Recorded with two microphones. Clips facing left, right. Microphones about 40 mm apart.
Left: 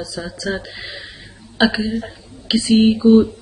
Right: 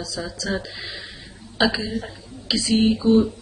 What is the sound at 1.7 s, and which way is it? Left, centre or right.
Speech, centre.